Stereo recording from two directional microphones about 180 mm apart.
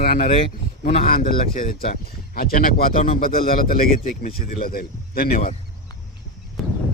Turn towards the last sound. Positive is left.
turn(degrees=0)  # may be behind; listen again after turning